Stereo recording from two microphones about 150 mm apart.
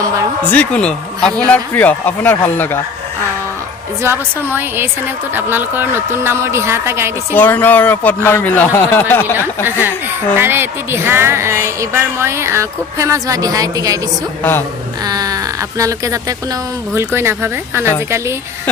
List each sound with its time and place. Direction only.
0.5 s speech: 10° left (ahead or behind)
4.0 s speech: 15° right (ahead or behind)
7.3 s speech: 10° left (ahead or behind)
10.3 s speech: 15° right (ahead or behind)
15.0 s a sound: 25° right (ahead or behind)
15.8 s speech: 20° right (ahead or behind)